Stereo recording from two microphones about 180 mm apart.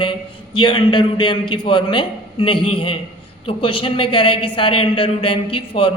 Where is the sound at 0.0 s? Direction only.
25° left (ahead or behind).